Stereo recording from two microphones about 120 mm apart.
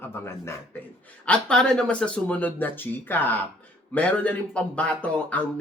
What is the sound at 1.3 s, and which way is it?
Speech, 5° left (ahead or behind).